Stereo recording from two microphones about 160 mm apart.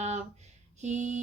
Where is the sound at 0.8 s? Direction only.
45° right (ahead or behind).